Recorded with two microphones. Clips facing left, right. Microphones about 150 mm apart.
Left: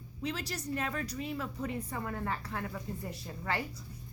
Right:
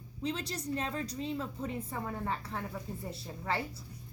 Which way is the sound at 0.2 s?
30° right (ahead or behind).